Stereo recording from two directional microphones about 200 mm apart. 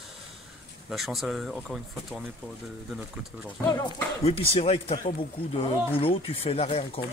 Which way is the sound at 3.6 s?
15° left (ahead or behind).